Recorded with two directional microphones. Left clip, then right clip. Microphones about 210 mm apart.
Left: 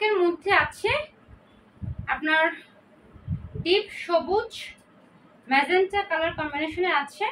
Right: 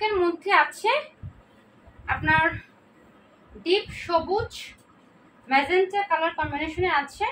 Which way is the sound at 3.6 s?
10° left (ahead or behind).